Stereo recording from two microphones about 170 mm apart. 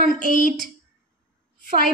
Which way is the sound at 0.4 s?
55° right (ahead or behind).